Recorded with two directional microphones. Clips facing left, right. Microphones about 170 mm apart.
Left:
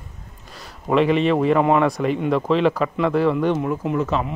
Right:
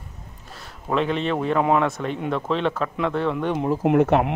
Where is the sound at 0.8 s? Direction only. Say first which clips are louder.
Left 6 dB; 5° left (ahead or behind).